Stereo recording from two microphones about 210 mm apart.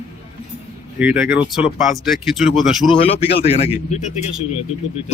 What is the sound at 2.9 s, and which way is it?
A man's voice, 25° left (ahead or behind).